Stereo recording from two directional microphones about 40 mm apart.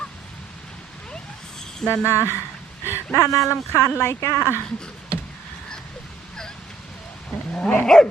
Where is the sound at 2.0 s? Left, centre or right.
Left.